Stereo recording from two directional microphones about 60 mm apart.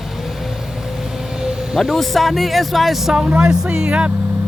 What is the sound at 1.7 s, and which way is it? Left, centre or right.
Speech, centre.